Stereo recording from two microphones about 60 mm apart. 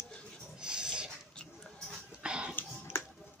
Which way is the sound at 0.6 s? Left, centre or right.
Centre.